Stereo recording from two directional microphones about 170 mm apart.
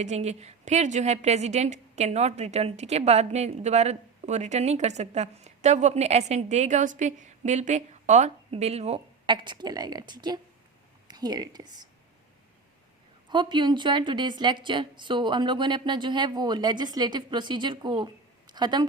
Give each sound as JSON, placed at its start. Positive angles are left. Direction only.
{"t": 0.0, "sound": "a woman's voice", "side_deg": -40}
{"t": 13.2, "sound": "speech", "side_deg": -25}